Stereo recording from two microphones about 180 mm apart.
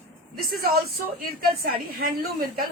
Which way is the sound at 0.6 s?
55° right (ahead or behind).